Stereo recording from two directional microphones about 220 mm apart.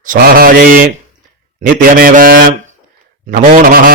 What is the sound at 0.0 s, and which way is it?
Speech, 40° right (ahead or behind).